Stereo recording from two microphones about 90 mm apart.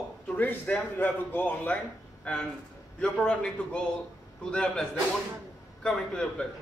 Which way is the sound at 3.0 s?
10° left (ahead or behind).